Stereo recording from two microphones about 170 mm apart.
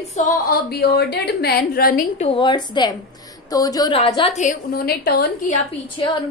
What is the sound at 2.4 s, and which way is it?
A woman's voice, 25° left (ahead or behind).